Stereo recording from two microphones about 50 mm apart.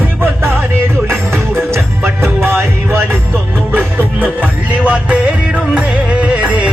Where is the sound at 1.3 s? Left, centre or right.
Right.